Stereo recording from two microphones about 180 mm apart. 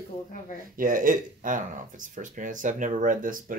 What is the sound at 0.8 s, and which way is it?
Speech, 50° right (ahead or behind).